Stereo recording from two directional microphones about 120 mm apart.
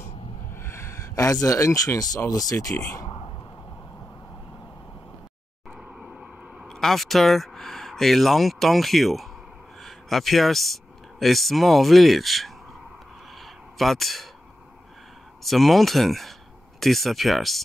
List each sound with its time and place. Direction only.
0.6 s speech: 20° left (ahead or behind)
3.1 s whispering: 45° left (ahead or behind)
5.7 s a sound: 5° right (ahead or behind)
9.8 s speech: centre (ahead or behind)
13.3 s a sound: centre (ahead or behind)
15.4 s speech: centre (ahead or behind)